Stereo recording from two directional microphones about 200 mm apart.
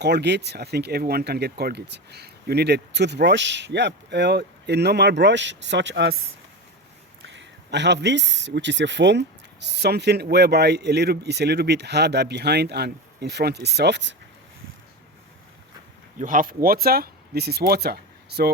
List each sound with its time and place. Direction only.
0.0 s speech: 55° right (ahead or behind)
7.3 s speech: 60° right (ahead or behind)
16.1 s speech: 45° right (ahead or behind)